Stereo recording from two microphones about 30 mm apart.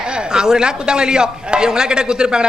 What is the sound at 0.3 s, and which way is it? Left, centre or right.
A woman's voice, right.